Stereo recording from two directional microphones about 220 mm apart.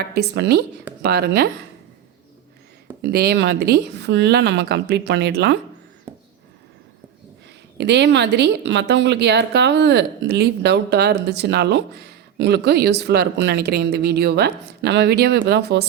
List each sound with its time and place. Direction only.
0.0 s a woman's voice: 45° right (ahead or behind)
3.0 s a woman's voice: 45° right (ahead or behind)
6.1 s a sound: 10° right (ahead or behind)
7.8 s a woman's voice: 50° right (ahead or behind)